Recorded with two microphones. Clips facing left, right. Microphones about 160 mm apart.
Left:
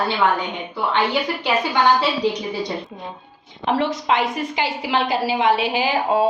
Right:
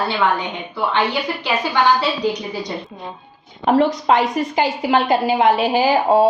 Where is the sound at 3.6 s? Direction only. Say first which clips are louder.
Right 5 dB; 40° right (ahead or behind).